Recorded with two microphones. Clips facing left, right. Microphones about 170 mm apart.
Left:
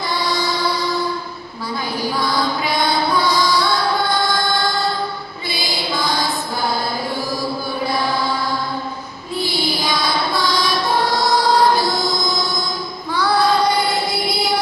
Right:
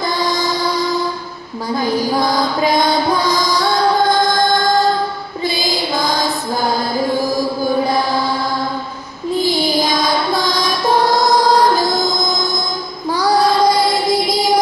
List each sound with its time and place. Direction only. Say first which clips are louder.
0.2 s music: right 2 dB; 45° right (ahead or behind)
2.0 s music: right 2 dB; 45° right (ahead or behind)
9.4 s music: right 5 dB; 45° right (ahead or behind)
13.1 s child singing: right 3 dB; 40° right (ahead or behind)